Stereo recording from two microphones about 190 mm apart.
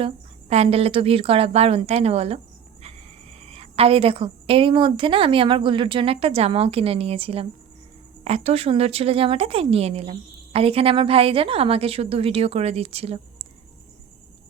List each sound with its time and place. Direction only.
0.0 s a woman's voice: 35° right (ahead or behind)